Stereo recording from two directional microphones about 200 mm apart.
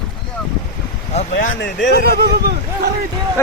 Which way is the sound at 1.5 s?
60° left (ahead or behind).